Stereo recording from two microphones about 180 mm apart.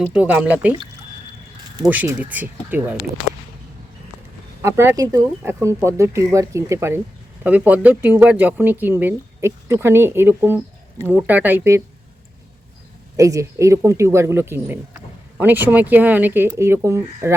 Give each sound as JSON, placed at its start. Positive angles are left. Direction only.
{"t": 0.0, "sound": "speech", "side_deg": -10}
{"t": 1.9, "sound": "speech", "side_deg": -10}
{"t": 4.6, "sound": "speech", "side_deg": -15}
{"t": 13.1, "sound": "speech", "side_deg": -15}